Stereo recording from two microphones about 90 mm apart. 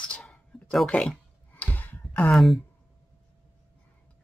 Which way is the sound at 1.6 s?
20° left (ahead or behind).